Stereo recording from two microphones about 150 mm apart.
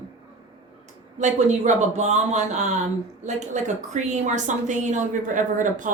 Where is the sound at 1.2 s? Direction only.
50° right (ahead or behind).